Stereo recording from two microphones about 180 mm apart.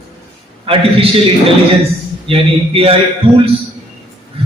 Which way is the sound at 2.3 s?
30° right (ahead or behind).